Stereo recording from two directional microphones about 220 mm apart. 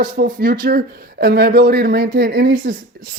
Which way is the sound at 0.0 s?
40° right (ahead or behind).